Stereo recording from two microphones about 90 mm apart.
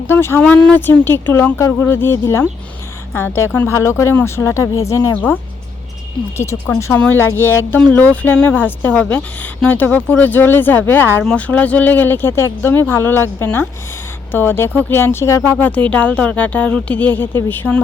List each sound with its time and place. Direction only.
0.1 s a woman's voice: 25° left (ahead or behind)
6.3 s a woman's voice: 30° left (ahead or behind); by 17.8 s 15° left (ahead or behind)